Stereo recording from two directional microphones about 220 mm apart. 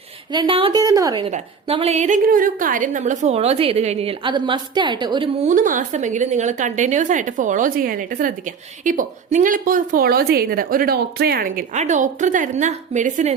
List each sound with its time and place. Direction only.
0.3 s a woman's voice: 20° right (ahead or behind)
5.5 s a woman's voice: 35° right (ahead or behind)